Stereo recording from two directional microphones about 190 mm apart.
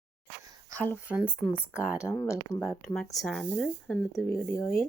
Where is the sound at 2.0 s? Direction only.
15° left (ahead or behind).